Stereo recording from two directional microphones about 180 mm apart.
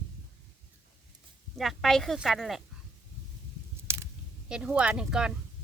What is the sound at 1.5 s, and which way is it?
Speech, centre (ahead or behind).